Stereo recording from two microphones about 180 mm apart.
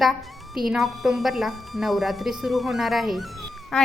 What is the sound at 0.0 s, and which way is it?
A woman's voice, centre (ahead or behind).